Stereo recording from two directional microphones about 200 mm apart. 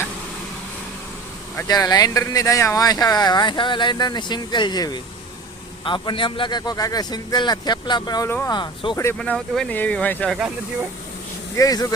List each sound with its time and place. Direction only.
1.5 s speech: 20° left (ahead or behind)
9.0 s speech: 10° left (ahead or behind)
11.5 s speech: 20° left (ahead or behind)